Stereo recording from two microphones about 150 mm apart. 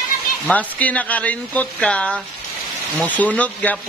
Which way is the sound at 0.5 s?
10° left (ahead or behind).